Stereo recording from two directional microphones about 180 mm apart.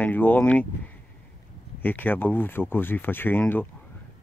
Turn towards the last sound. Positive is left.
turn(degrees=10)  # may be behind; listen again after turning